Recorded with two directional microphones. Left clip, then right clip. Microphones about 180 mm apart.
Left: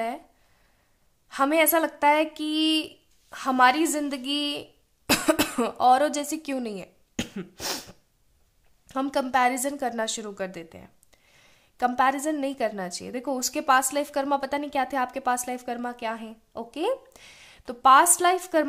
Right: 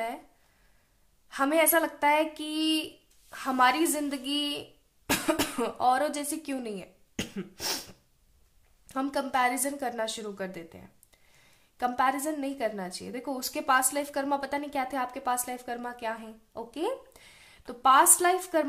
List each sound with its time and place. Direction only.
1.3 s a woman's voice: 30° left (ahead or behind)